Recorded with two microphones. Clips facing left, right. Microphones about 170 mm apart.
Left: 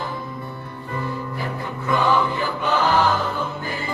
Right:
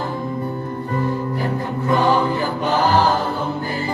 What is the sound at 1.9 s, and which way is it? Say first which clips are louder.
Choir: right 2 dB; 40° right (ahead or behind).